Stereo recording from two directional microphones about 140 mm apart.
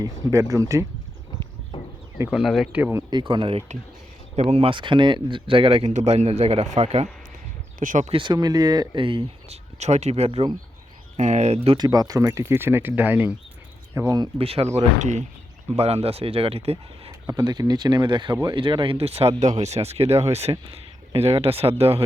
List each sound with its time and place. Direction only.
0.0 s speech: 25° right (ahead or behind)
2.3 s speech: centre (ahead or behind)
3.1 s speech: 35° right (ahead or behind)
4.4 s speech: 50° right (ahead or behind)
7.8 s speech: 65° right (ahead or behind)
8.1 s speech: 35° right (ahead or behind)
9.7 s speech: 55° right (ahead or behind)
11.8 s speech: 25° right (ahead or behind)
14.3 s speech: 45° right (ahead or behind)
14.8 s speech: 60° right (ahead or behind)
15.7 s speech: 50° right (ahead or behind)
17.1 s speech: 25° right (ahead or behind); by 22.0 s 45° right (ahead or behind)